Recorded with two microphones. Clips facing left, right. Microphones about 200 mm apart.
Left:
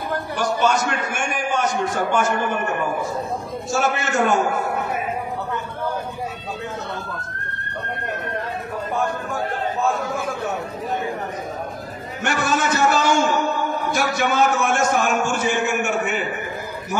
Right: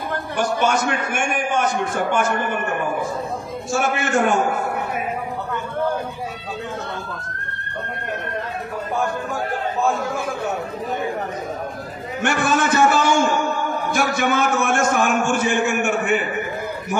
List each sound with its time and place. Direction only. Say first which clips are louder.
0.4 s a man's voice: right 1 dB; 55° right (ahead or behind)
3.7 s a man's voice: right 1 dB; 55° right (ahead or behind)
12.2 s a man's voice: right 2 dB; 50° right (ahead or behind)